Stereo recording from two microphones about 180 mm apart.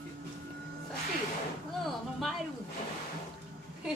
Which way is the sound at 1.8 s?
Centre (ahead or behind).